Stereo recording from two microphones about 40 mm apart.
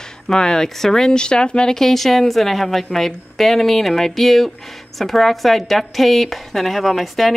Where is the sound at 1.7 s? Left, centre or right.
Centre.